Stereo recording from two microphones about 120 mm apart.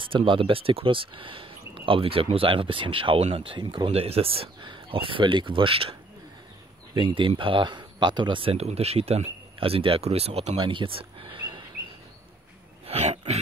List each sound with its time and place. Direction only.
0.0 s speech: 45° right (ahead or behind)
7.0 s speech: 45° right (ahead or behind)
12.8 s a sound: 55° right (ahead or behind)